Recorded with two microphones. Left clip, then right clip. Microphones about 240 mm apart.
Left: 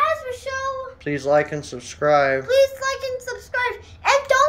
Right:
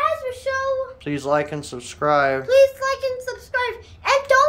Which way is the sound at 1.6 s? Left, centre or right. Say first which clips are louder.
Even; right.